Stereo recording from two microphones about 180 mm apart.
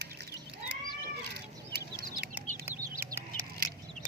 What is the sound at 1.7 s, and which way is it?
Chicken, 60° right (ahead or behind).